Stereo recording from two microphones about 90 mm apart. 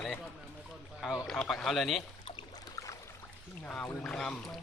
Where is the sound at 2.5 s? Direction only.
40° left (ahead or behind).